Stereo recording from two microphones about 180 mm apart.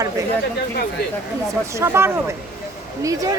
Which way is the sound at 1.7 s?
15° right (ahead or behind).